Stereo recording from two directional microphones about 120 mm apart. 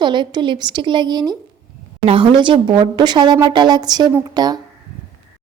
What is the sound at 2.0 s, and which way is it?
A woman's voice, 45° right (ahead or behind).